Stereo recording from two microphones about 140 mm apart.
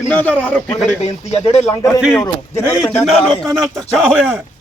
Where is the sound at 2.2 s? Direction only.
20° left (ahead or behind).